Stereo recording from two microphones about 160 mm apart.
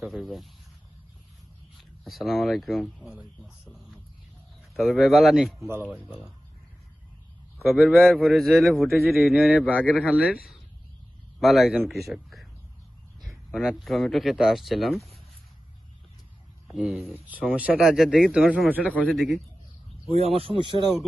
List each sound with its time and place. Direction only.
0.0 s a man's voice: centre (ahead or behind)
1.8 s a man's voice: centre (ahead or behind)
7.9 s a man's voice: centre (ahead or behind)
11.3 s a man's voice: centre (ahead or behind)
16.6 s a man's voice: 5° right (ahead or behind)
18.9 s a man's voice: 5° left (ahead or behind)
20.1 s speech: 40° right (ahead or behind)